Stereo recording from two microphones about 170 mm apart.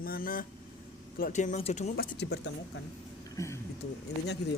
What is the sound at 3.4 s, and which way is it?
Speech, 20° left (ahead or behind).